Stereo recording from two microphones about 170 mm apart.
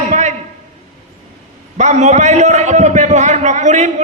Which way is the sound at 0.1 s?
45° right (ahead or behind).